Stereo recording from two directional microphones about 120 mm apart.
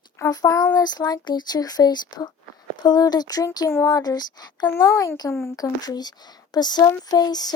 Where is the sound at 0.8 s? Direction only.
35° left (ahead or behind).